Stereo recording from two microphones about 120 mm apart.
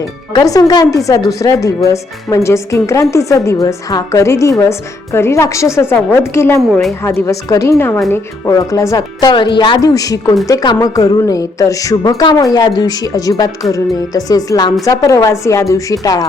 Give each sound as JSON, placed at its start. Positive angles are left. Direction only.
{"t": 0.3, "sound": "speech", "side_deg": 35}
{"t": 9.2, "sound": "a woman's voice", "side_deg": 40}